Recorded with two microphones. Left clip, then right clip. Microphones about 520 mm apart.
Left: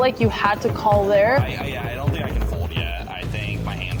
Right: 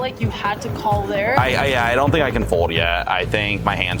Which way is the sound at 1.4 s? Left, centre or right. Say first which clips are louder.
Right 11 dB; right.